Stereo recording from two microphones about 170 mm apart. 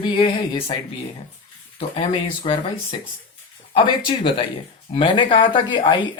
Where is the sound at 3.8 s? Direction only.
30° left (ahead or behind).